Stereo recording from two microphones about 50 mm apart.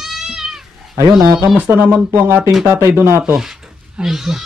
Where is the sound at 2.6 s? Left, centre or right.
Right.